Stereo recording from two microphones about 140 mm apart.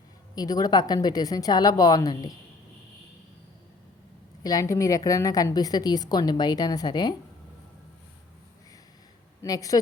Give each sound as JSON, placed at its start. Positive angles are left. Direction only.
{"t": 0.3, "sound": "a woman's voice", "side_deg": 25}
{"t": 4.4, "sound": "a woman's voice", "side_deg": 25}
{"t": 9.4, "sound": "a woman's voice", "side_deg": 25}